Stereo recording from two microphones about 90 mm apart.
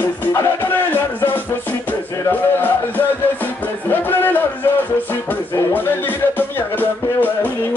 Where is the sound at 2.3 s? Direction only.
20° left (ahead or behind).